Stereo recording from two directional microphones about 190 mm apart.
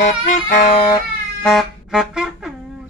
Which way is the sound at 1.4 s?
Centre (ahead or behind).